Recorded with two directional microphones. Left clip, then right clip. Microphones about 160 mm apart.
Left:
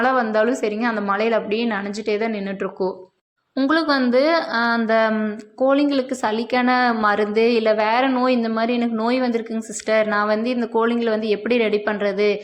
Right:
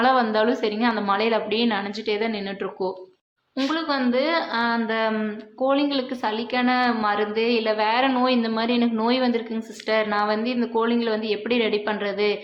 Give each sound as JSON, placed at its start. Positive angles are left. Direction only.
{"t": 0.0, "sound": "a woman's voice", "side_deg": 20}
{"t": 3.7, "sound": "a woman's voice", "side_deg": 45}